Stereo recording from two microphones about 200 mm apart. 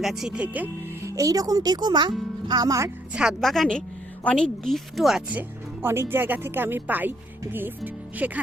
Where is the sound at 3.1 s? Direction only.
5° right (ahead or behind).